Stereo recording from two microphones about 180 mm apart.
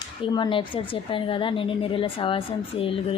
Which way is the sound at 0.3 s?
25° left (ahead or behind).